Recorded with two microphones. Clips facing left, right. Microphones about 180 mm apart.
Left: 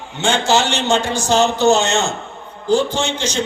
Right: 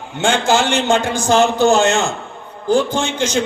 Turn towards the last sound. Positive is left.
turn(degrees=-55)  # may be behind; listen again after turning